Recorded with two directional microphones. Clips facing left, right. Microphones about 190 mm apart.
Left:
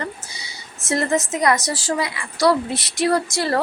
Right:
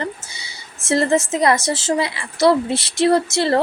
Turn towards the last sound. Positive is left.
turn(degrees=-25)  # may be behind; listen again after turning